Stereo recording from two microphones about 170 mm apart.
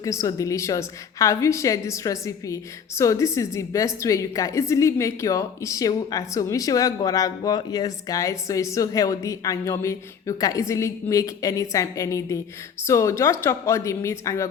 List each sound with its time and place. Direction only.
0.0 s a woman's voice: 20° left (ahead or behind)